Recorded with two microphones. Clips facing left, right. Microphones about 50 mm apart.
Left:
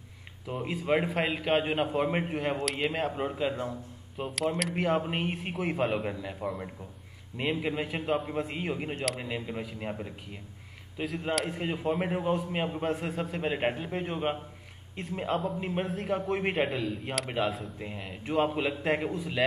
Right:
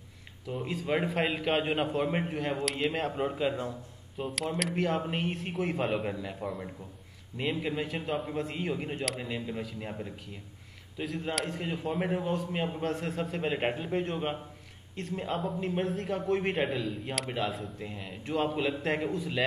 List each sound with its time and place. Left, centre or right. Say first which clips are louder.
0.5 s a man's voice: left 3 dB; centre
2.6 s a man's voice: left 1 dB; centre
7.3 s a man's voice: left 1 dB; centre
11.3 s speech: left 2 dB; centre
11.6 s a man's voice: left 2 dB; centre
15.6 s a man's voice: right 1 dB; centre
17.7 s a man's voice: left 1 dB; centre